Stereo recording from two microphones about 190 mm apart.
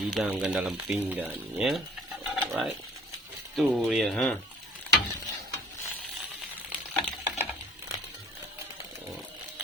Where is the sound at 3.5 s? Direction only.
Centre (ahead or behind).